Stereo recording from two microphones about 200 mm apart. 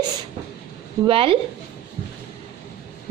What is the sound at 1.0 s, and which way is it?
Speech, 25° right (ahead or behind).